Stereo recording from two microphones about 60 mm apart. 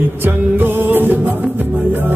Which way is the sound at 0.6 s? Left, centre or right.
Right.